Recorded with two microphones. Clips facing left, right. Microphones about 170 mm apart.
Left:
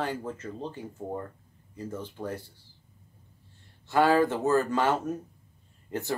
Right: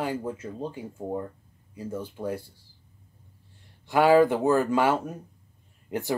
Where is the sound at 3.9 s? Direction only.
15° right (ahead or behind).